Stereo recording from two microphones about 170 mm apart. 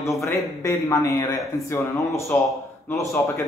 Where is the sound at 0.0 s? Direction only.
15° left (ahead or behind).